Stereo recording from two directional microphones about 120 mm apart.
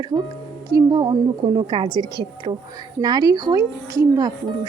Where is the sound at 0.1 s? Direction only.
40° right (ahead or behind).